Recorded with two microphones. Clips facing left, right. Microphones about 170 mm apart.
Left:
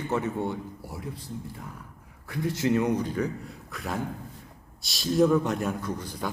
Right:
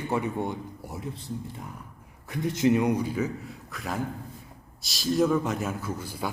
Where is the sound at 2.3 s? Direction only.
20° right (ahead or behind).